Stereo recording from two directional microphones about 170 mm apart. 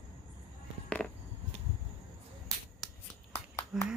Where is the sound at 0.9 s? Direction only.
5° left (ahead or behind).